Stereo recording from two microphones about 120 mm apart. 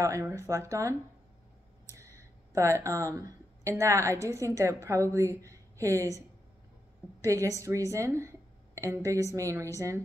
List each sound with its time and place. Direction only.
0.0 s speech: 25° right (ahead or behind)
7.2 s speech: 25° right (ahead or behind)